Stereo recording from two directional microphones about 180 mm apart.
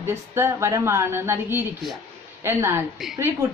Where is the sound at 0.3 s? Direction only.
15° right (ahead or behind).